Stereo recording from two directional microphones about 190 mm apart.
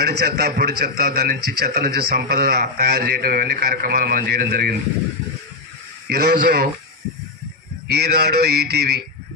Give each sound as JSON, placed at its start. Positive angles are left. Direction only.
{"t": 0.0, "sound": "speech", "side_deg": -60}
{"t": 6.0, "sound": "a man's voice", "side_deg": -55}
{"t": 8.0, "sound": "speech", "side_deg": -55}